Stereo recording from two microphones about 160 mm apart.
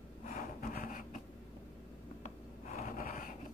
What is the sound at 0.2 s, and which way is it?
Wood, 50° left (ahead or behind).